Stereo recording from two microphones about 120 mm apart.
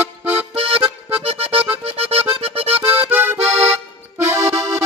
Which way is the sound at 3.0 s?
20° right (ahead or behind).